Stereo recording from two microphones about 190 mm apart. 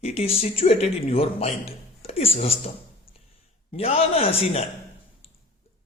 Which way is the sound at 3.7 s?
30° left (ahead or behind).